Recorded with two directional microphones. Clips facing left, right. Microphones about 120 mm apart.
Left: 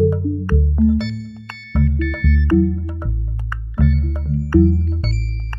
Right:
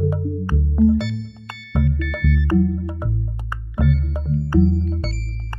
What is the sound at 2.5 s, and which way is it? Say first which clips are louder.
Music: left 5 dB; 15° right (ahead or behind).